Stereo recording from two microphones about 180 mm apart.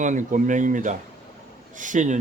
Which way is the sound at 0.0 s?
45° right (ahead or behind).